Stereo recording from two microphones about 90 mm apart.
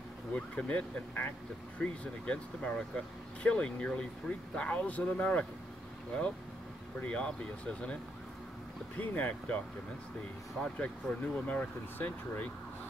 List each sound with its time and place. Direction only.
0.3 s speech: 15° left (ahead or behind)
7.0 s speech: 15° left (ahead or behind)
10.6 s speech: 10° left (ahead or behind)